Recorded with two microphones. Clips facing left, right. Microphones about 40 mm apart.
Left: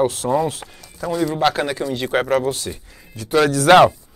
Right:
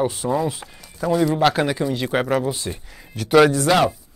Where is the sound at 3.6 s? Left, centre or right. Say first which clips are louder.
Left 7 dB; left.